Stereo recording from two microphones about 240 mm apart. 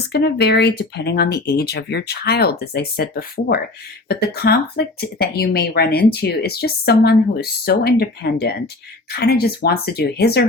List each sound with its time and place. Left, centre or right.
0.1 s speech: left